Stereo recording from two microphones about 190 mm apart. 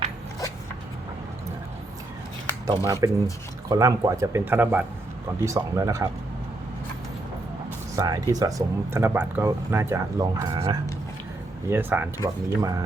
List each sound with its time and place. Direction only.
2.6 s speech: 20° right (ahead or behind)
7.9 s speech: 20° right (ahead or behind)